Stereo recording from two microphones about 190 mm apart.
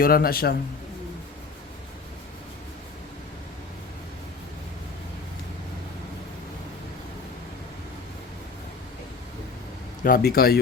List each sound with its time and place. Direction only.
0.0 s speech: 50° left (ahead or behind)
10.0 s speech: 50° left (ahead or behind)